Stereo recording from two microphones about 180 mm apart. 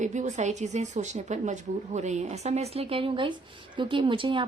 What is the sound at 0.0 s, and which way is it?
Speech, 40° right (ahead or behind).